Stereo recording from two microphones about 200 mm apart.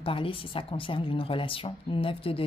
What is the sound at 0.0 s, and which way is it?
A woman's voice, 25° left (ahead or behind).